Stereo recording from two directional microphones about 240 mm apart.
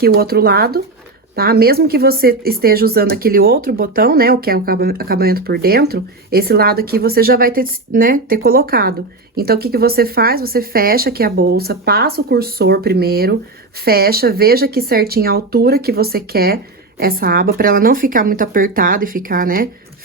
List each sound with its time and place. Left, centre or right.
0.0 s speech: right